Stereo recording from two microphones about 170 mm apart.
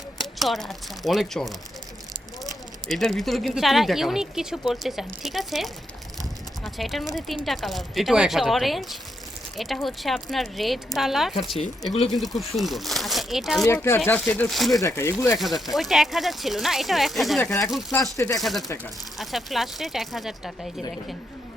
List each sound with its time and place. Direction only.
0.2 s speech: centre (ahead or behind)
6.7 s speech: centre (ahead or behind)
13.7 s speech: 15° left (ahead or behind)
14.3 s speech: 5° left (ahead or behind)
14.8 s speech: 15° left (ahead or behind)
15.4 s speech: centre (ahead or behind)